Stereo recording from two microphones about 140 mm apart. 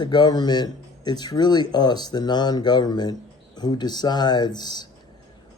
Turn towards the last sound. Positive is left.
turn(degrees=30)  # may be behind; listen again after turning